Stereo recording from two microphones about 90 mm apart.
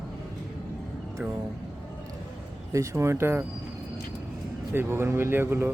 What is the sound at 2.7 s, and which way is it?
Speech, 35° right (ahead or behind).